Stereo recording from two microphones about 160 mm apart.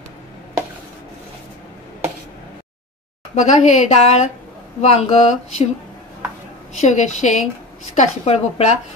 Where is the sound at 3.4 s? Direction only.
50° left (ahead or behind).